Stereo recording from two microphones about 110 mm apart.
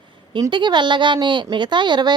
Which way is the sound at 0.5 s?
45° right (ahead or behind).